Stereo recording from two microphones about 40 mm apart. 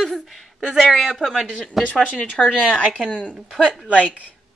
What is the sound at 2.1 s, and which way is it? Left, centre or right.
Speech, left.